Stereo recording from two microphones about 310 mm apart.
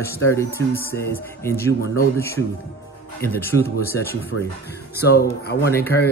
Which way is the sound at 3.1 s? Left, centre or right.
Centre.